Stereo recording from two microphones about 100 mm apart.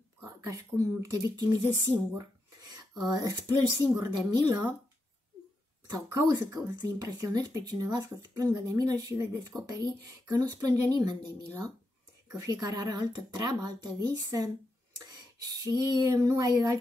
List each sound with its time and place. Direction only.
0.2 s a woman's voice: 30° right (ahead or behind)
5.9 s a woman's voice: 35° right (ahead or behind)
15.6 s a woman's voice: 35° right (ahead or behind)